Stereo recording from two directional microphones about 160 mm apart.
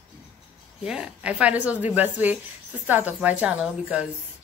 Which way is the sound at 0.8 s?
5° right (ahead or behind).